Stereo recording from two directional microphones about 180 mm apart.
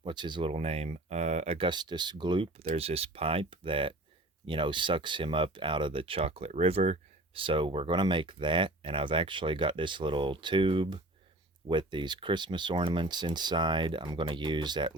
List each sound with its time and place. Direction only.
0.0 s speech: 25° right (ahead or behind)